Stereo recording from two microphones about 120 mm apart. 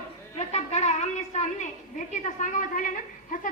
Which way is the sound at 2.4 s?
90° left.